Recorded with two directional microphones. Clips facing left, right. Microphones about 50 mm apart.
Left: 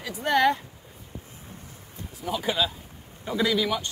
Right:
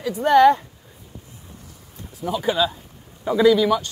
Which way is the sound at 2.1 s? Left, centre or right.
Centre.